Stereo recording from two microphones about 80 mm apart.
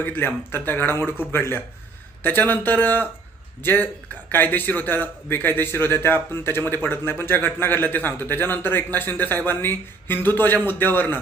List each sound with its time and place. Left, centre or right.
0.0 s a man's voice: left